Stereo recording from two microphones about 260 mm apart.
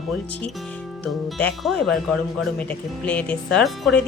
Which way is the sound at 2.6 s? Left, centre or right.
Centre.